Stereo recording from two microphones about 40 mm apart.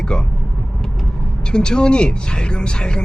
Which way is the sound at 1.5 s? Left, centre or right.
Left.